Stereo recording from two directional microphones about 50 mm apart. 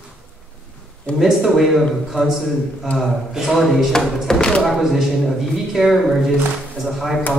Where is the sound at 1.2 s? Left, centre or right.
Centre.